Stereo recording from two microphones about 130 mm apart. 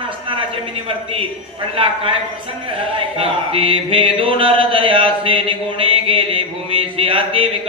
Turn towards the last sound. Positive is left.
turn(degrees=-45)  # may be behind; listen again after turning